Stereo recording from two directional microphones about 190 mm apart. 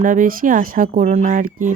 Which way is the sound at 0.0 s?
45° right (ahead or behind).